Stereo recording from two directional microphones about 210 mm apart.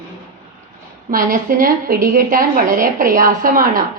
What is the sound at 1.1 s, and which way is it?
A woman's voice, 45° right (ahead or behind).